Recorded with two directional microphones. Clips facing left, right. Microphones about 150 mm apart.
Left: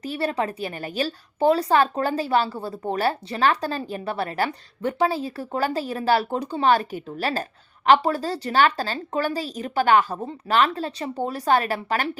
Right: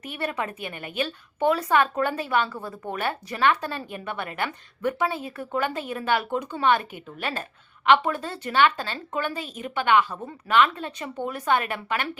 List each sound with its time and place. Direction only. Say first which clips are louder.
0.0 s a woman's voice: left 5 dB; 30° left (ahead or behind)